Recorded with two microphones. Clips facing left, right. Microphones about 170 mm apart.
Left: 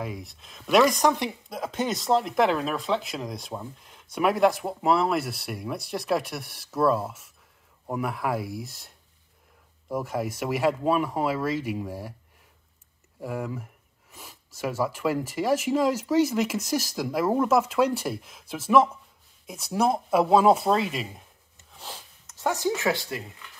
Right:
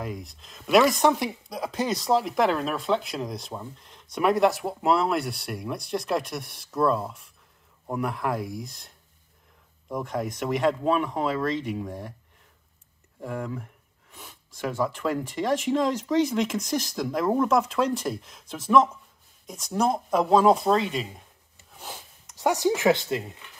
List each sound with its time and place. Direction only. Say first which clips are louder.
0.0 s speech: even; centre (ahead or behind)
13.2 s speech: even; 5° left (ahead or behind)
21.7 s sniff: right 1 dB; 10° right (ahead or behind)
22.7 s speech: right 6 dB; 20° right (ahead or behind)